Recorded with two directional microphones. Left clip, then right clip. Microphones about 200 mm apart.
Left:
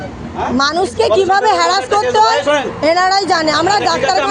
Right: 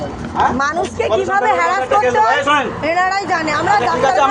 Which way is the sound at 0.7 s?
55° left (ahead or behind).